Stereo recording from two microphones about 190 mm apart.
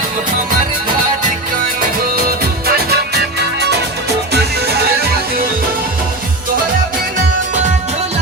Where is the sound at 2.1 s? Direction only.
50° right (ahead or behind).